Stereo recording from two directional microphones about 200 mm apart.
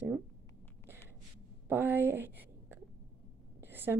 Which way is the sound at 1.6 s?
10° right (ahead or behind).